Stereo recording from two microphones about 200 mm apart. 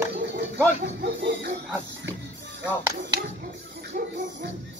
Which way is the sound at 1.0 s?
60° right (ahead or behind).